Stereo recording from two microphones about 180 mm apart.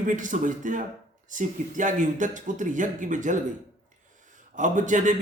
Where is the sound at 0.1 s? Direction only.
45° right (ahead or behind).